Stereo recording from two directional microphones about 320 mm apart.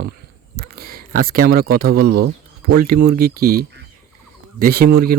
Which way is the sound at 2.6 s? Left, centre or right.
Right.